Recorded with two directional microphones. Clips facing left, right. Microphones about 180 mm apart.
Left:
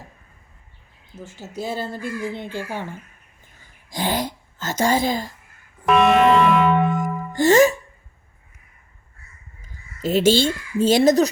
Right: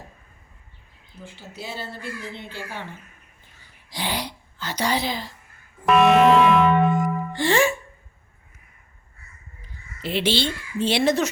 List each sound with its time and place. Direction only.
1.2 s speech: 45° left (ahead or behind)
3.6 s a sound: 45° left (ahead or behind)
5.8 s music: centre (ahead or behind)
7.3 s music: 45° left (ahead or behind)
9.6 s speech: 45° left (ahead or behind)